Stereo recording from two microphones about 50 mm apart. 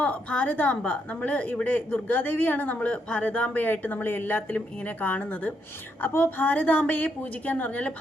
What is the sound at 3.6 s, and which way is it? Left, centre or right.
A woman's voice, left.